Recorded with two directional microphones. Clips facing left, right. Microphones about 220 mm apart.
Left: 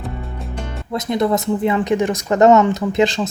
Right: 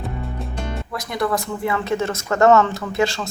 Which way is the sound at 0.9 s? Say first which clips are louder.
Left 6 dB; 20° left (ahead or behind).